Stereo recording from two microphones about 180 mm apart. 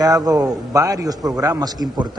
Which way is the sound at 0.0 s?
20° right (ahead or behind).